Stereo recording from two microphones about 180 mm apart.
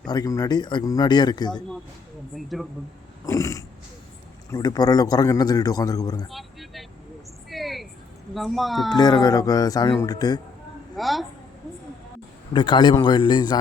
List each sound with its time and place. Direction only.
0.1 s a man's voice: 20° left (ahead or behind)
2.3 s a child's voice: centre (ahead or behind)
3.2 s a sound: 15° left (ahead or behind)
4.5 s a man's voice: 20° left (ahead or behind)
6.3 s speech: centre (ahead or behind)
7.5 s a sound: centre (ahead or behind)
8.3 s a child's voice: centre (ahead or behind)
8.9 s a man's voice: 20° left (ahead or behind)
10.9 s a child's voice: centre (ahead or behind)
12.5 s a man's voice: 25° left (ahead or behind)